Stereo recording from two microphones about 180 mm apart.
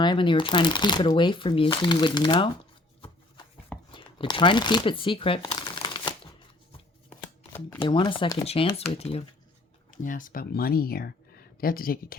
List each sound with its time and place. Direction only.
0.0 s speech: 25° left (ahead or behind)
3.9 s shuffling cards: 25° left (ahead or behind)
7.2 s shuffling cards: 10° left (ahead or behind)
7.9 s speech: 25° left (ahead or behind)
9.9 s speech: 45° left (ahead or behind)